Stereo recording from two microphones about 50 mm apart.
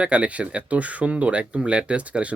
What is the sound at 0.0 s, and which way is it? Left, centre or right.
Speech, right.